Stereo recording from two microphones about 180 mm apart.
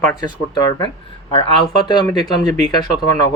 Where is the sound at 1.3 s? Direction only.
25° left (ahead or behind).